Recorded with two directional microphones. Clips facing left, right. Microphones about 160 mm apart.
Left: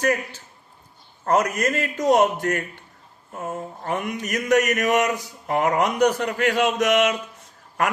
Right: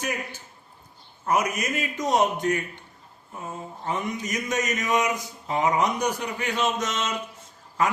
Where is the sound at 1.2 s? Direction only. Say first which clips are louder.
Left 4 dB; 70° left (ahead or behind).